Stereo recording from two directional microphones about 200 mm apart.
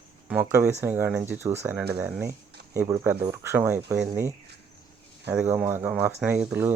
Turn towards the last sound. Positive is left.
turn(degrees=-10)  # may be behind; listen again after turning